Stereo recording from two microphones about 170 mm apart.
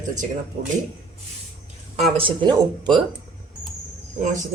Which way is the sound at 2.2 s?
30° right (ahead or behind).